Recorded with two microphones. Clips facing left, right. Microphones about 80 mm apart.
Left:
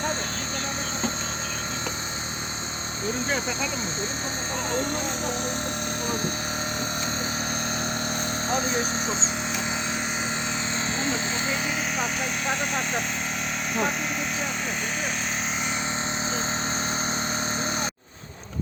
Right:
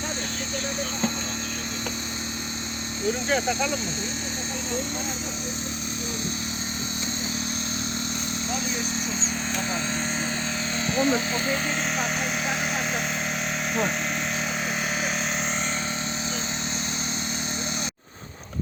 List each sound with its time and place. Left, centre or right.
8.4 s speech: left
10.9 s speech: left
12.5 s speech: centre